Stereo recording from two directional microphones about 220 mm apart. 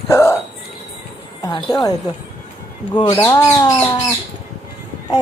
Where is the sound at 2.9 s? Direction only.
20° left (ahead or behind).